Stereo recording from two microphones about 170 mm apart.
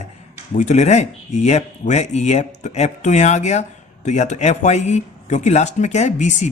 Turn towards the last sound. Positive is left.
turn(degrees=45)  # may be behind; listen again after turning